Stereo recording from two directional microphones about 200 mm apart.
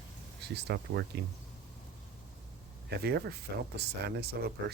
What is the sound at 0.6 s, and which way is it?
Speech, 55° right (ahead or behind).